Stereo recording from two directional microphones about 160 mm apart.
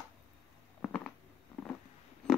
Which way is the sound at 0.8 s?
5° left (ahead or behind).